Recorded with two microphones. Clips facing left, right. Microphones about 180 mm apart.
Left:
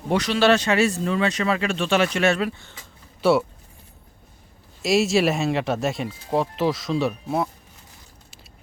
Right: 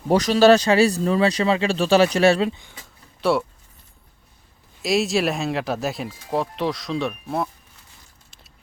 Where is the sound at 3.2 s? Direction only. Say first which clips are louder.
Left 2 dB; centre (ahead or behind).